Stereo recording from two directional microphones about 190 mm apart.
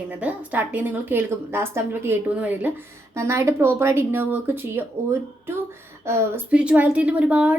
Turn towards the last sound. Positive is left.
turn(degrees=-5)  # may be behind; listen again after turning